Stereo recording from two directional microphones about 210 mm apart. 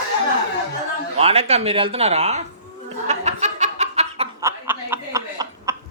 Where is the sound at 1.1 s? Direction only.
30° right (ahead or behind).